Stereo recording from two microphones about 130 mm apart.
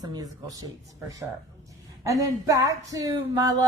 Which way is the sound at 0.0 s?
30° right (ahead or behind).